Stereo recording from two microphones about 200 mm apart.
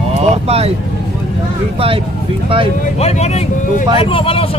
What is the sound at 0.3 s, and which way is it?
Speech, 30° right (ahead or behind).